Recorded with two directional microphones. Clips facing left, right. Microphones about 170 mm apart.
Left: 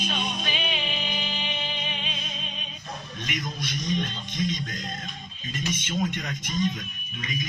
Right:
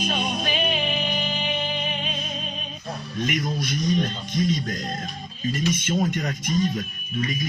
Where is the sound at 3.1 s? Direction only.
45° right (ahead or behind).